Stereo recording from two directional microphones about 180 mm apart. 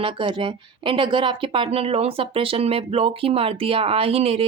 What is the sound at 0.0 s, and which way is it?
Speech, 30° right (ahead or behind).